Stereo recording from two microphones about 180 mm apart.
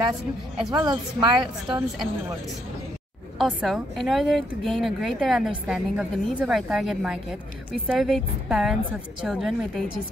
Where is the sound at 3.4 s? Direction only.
5° right (ahead or behind).